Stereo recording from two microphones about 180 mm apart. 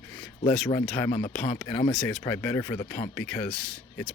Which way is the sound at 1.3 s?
5° left (ahead or behind).